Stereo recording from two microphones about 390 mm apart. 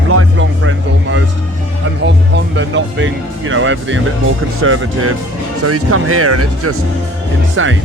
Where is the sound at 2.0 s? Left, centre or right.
Right.